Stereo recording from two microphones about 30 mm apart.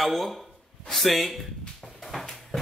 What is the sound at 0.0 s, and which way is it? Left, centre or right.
Speech, centre.